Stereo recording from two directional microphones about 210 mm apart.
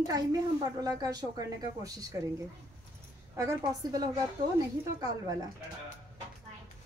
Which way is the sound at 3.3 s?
15° right (ahead or behind).